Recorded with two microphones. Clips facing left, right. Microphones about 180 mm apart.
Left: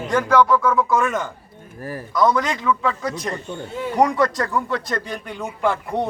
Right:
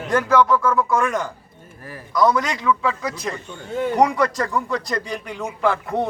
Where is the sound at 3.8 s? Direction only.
50° right (ahead or behind).